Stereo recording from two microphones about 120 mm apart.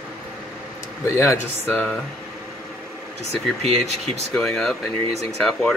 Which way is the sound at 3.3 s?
60° right (ahead or behind).